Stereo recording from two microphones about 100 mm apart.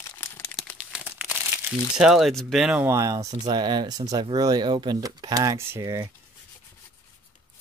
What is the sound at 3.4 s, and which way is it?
Speech, 50° right (ahead or behind).